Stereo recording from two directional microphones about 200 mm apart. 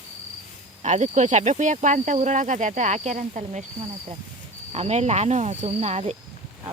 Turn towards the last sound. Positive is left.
turn(degrees=-30)  # may be behind; listen again after turning